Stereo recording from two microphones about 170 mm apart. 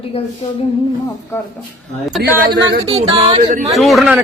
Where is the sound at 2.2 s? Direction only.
75° right (ahead or behind).